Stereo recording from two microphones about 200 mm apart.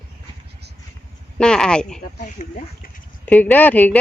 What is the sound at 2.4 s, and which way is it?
Speech, 40° left (ahead or behind).